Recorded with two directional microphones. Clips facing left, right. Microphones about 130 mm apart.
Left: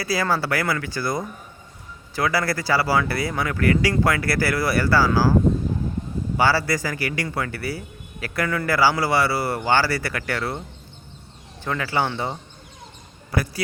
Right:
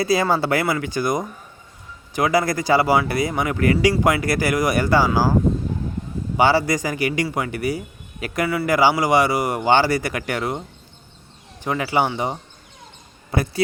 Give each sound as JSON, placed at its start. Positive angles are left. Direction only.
{"t": 0.0, "sound": "speech", "side_deg": -20}
{"t": 6.3, "sound": "speech", "side_deg": -20}
{"t": 11.6, "sound": "speech", "side_deg": -15}